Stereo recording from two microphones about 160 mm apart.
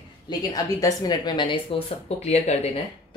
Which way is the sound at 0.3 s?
25° left (ahead or behind).